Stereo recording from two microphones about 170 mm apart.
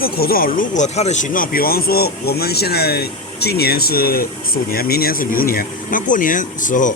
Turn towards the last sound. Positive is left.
turn(degrees=50)  # may be behind; listen again after turning